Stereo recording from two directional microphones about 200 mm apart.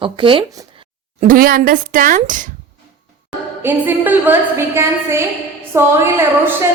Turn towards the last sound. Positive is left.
turn(degrees=-15)  # may be behind; listen again after turning